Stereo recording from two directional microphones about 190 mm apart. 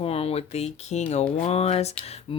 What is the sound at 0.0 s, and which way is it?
Speech, 30° left (ahead or behind).